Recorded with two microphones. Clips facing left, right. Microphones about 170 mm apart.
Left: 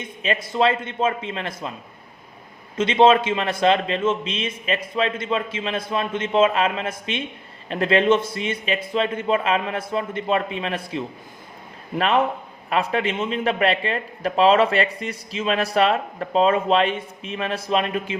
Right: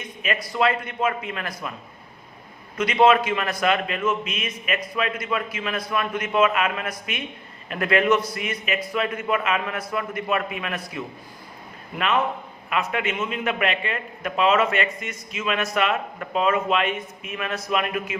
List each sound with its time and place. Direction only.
0.0 s a man's voice: 25° left (ahead or behind)
2.7 s a man's voice: 25° left (ahead or behind)